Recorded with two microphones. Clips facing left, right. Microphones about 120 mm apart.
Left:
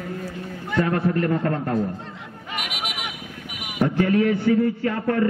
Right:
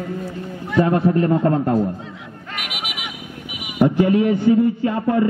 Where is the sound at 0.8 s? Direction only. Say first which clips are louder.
Right 5 dB; 25° right (ahead or behind).